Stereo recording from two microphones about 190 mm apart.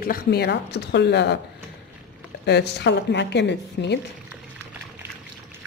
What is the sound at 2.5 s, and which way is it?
Speech, 60° left (ahead or behind).